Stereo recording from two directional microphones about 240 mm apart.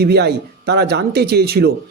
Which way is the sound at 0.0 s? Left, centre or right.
Right.